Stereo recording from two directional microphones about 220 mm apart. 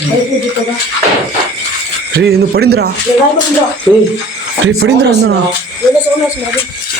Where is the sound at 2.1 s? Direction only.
45° right (ahead or behind).